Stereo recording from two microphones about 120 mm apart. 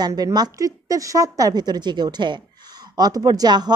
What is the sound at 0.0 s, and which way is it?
A woman's voice, 35° right (ahead or behind).